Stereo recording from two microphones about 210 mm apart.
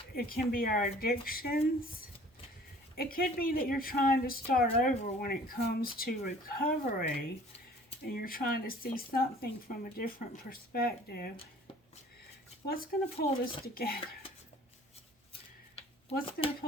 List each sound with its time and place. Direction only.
0.2 s speech: 45° left (ahead or behind)
2.9 s speech: 45° left (ahead or behind)
12.6 s speech: 45° left (ahead or behind)
16.4 s speech: 45° left (ahead or behind)